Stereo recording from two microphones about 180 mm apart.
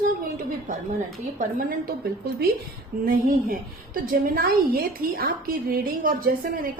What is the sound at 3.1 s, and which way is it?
A woman's voice, 50° right (ahead or behind).